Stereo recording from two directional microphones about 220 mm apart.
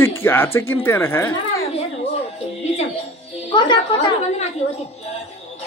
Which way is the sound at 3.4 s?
20° left (ahead or behind).